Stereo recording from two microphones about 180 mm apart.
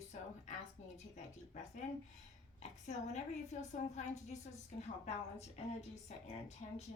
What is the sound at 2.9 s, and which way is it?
A woman's voice, 40° left (ahead or behind).